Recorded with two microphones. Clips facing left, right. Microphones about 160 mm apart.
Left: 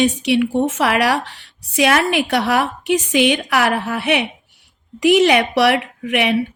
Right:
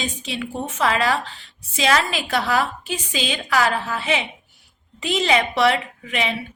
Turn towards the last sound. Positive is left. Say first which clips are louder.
# left 6 dB
turn(degrees=70)  # may be behind; listen again after turning